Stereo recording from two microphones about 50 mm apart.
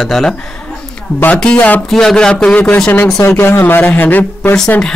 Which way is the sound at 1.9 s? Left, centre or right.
Centre.